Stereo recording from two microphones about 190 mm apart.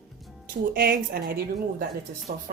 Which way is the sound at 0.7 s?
50° right (ahead or behind).